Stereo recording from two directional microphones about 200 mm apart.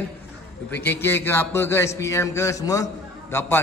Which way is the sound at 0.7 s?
10° left (ahead or behind).